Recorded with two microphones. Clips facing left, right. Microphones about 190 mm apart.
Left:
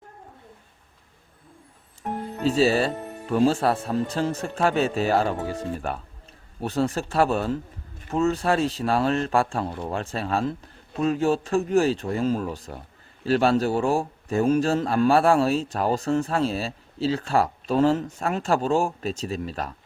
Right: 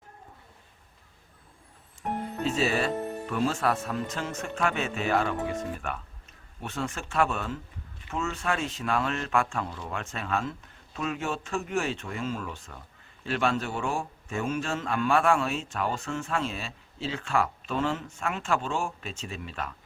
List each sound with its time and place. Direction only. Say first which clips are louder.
2.4 s a man's voice: left 7 dB; 35° left (ahead or behind)
9.6 s speech: left 8 dB; 55° left (ahead or behind)
9.9 s a man's voice: left 4 dB; 35° left (ahead or behind)